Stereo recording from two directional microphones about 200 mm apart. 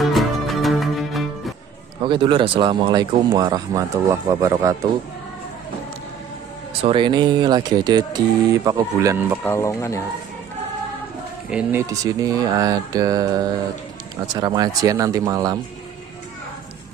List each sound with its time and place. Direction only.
0.0 s music: centre (ahead or behind)
2.0 s speech: 25° right (ahead or behind)
6.8 s speech: 25° right (ahead or behind)
9.4 s speech: 15° left (ahead or behind)
11.5 s speech: 10° right (ahead or behind)